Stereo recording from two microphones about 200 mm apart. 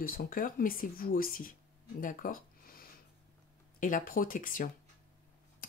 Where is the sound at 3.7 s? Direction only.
40° left (ahead or behind).